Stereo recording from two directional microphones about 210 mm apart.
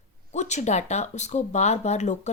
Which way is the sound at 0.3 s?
35° left (ahead or behind).